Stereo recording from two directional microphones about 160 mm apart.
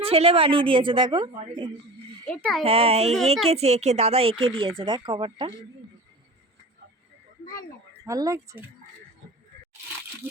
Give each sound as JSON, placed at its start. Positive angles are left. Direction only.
{"t": 0.0, "sound": "speech", "side_deg": -40}
{"t": 2.2, "sound": "a child's voice", "side_deg": 5}
{"t": 2.6, "sound": "speech", "side_deg": -40}
{"t": 8.0, "sound": "speech", "side_deg": -20}